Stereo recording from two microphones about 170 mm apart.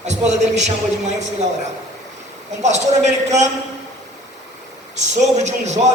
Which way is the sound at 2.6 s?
45° right (ahead or behind).